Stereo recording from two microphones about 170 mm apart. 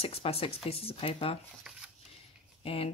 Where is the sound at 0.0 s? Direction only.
35° left (ahead or behind).